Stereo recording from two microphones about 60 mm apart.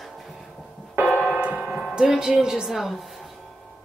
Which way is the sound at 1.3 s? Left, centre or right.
Right.